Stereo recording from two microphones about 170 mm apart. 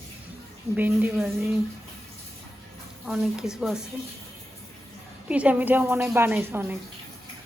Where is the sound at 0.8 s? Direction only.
10° right (ahead or behind).